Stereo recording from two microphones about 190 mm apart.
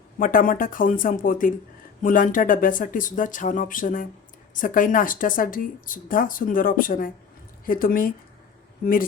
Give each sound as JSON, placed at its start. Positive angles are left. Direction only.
{"t": 0.2, "sound": "speech", "side_deg": 45}